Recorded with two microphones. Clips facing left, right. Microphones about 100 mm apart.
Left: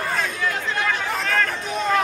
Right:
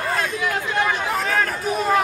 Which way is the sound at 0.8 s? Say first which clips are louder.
Right 2 dB; 5° right (ahead or behind).